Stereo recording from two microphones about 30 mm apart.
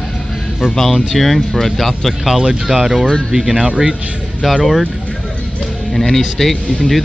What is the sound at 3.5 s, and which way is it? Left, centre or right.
Speech, right.